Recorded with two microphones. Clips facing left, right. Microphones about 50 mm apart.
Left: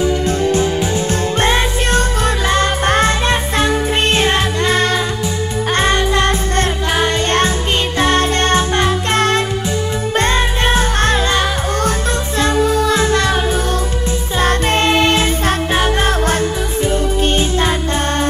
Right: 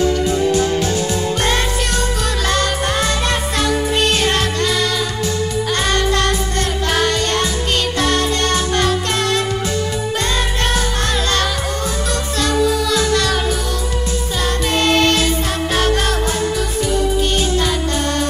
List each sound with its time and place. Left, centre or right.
1.4 s music: left
4.7 s music: left
5.8 s music: left
7.2 s music: left
11.2 s music: left
14.4 s music: left
14.9 s music: left